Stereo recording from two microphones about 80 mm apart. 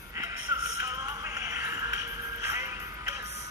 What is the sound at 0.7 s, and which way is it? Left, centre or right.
Music, right.